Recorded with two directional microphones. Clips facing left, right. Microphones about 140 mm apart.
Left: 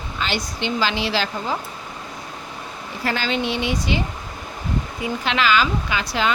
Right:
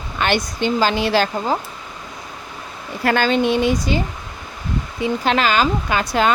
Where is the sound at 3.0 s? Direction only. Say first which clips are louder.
Right 7 dB; 55° right (ahead or behind).